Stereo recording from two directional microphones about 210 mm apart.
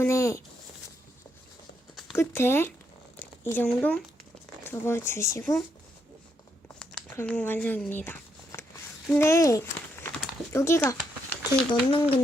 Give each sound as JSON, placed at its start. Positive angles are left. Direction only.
{"t": 0.0, "sound": "speech", "side_deg": 15}
{"t": 2.1, "sound": "speech", "side_deg": 10}
{"t": 6.7, "sound": "a sound", "side_deg": 5}
{"t": 9.1, "sound": "speech", "side_deg": 15}